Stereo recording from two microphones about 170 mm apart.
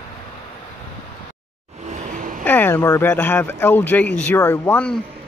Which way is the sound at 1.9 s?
50° right (ahead or behind).